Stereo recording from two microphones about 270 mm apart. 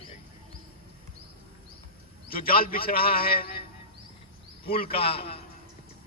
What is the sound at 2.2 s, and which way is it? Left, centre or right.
A man's voice, left.